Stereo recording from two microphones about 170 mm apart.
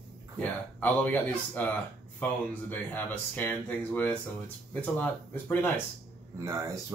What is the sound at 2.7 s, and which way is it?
Speech, 10° left (ahead or behind).